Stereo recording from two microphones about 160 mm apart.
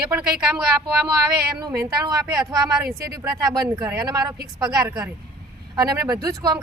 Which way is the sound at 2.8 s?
75° right (ahead or behind).